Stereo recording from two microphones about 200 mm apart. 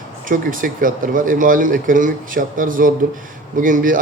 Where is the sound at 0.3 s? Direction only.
40° right (ahead or behind).